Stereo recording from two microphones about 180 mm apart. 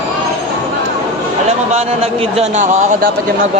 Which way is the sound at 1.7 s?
35° right (ahead or behind).